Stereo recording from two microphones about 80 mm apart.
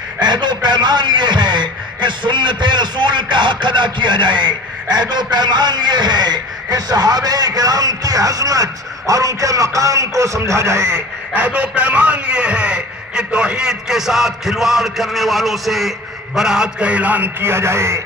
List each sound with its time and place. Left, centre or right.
0.2 s a man's voice: right
5.1 s a man's voice: right
11.0 s a man's voice: centre; by 18.0 s right